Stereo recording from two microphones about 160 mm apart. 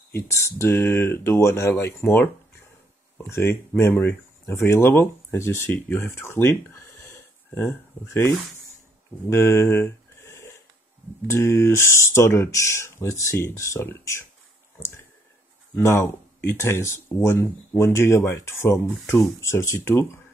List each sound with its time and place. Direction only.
0.3 s speech: 15° left (ahead or behind)
9.3 s a sound: 15° left (ahead or behind)
11.2 s speech: 15° left (ahead or behind)
15.7 s speech: 15° left (ahead or behind)